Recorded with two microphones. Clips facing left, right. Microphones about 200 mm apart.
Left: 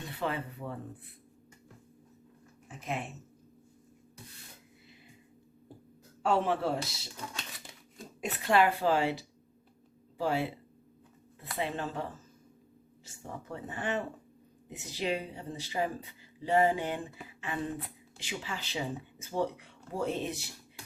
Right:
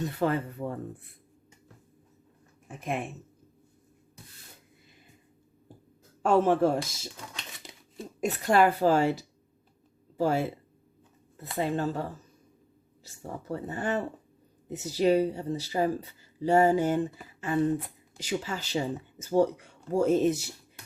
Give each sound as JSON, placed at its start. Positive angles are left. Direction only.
{"t": 0.0, "sound": "speech", "side_deg": -45}
{"t": 2.6, "sound": "speech", "side_deg": -55}
{"t": 6.2, "sound": "speech", "side_deg": -45}
{"t": 7.7, "sound": "a sound", "side_deg": -20}
{"t": 8.2, "sound": "speech", "side_deg": -45}
{"t": 11.5, "sound": "speech", "side_deg": -40}
{"t": 13.1, "sound": "speech", "side_deg": -40}